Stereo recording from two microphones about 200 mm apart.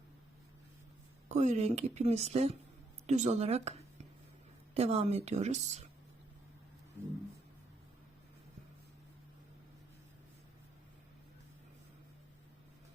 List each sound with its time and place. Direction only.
1.3 s speech: 35° right (ahead or behind)